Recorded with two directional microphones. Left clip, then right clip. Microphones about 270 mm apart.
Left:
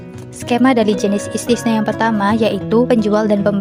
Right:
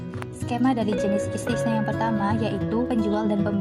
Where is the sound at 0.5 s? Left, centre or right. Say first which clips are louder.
Left 11 dB; left.